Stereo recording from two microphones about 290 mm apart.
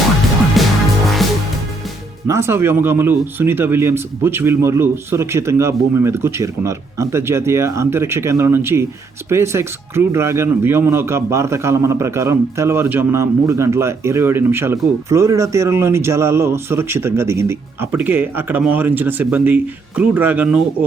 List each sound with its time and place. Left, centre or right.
0.6 s music: centre
2.2 s speech: centre